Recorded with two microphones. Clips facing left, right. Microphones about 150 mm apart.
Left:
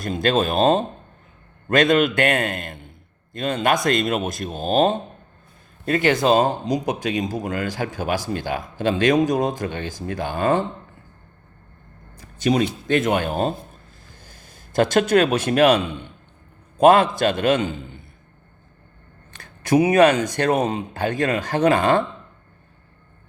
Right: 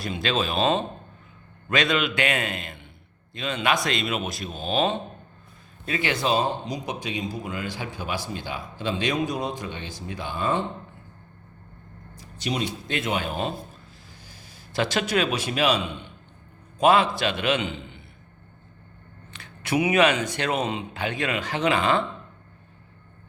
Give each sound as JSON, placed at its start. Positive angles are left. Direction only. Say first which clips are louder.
{"t": 0.0, "sound": "speech", "louder": "left 6 dB", "side_deg": 50}
{"t": 12.1, "sound": "speech", "louder": "left 9 dB", "side_deg": 50}
{"t": 16.8, "sound": "speech", "louder": "left 5 dB", "side_deg": 50}
{"t": 19.3, "sound": "speech", "louder": "left 7 dB", "side_deg": 45}